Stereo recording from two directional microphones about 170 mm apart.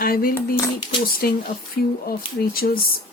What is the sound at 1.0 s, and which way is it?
Speech, 60° left (ahead or behind).